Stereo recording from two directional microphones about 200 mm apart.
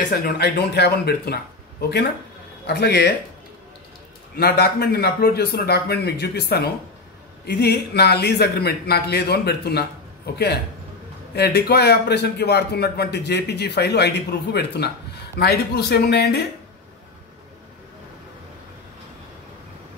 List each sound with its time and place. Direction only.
0.1 s a man's voice: 55° left (ahead or behind)
4.4 s a man's voice: 55° left (ahead or behind)